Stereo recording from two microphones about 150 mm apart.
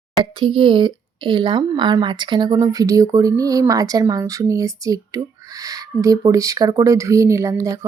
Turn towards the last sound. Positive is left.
turn(degrees=-20)  # may be behind; listen again after turning